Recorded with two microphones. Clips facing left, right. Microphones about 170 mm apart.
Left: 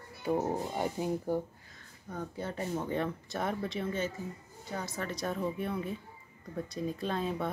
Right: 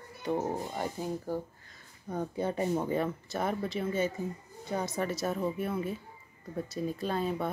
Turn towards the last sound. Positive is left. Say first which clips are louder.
# right 2 dB
turn(degrees=0)  # may be behind; listen again after turning